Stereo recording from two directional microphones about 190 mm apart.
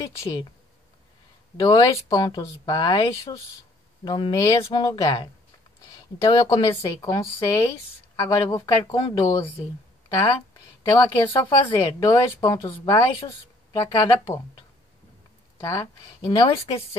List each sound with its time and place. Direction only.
0.2 s speech: 20° left (ahead or behind)
1.6 s speech: 20° left (ahead or behind)
15.5 s speech: 15° left (ahead or behind)
16.3 s speech: 30° left (ahead or behind)